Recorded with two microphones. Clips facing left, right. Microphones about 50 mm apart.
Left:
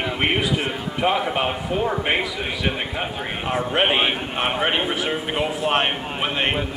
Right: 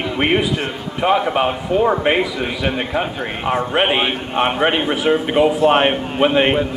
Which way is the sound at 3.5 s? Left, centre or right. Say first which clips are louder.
Right 3 dB; right.